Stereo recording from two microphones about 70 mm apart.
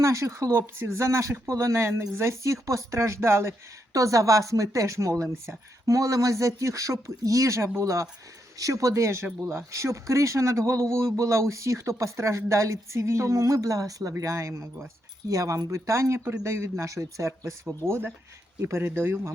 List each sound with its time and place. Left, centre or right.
0.0 s a woman's voice: right
3.9 s a woman's voice: right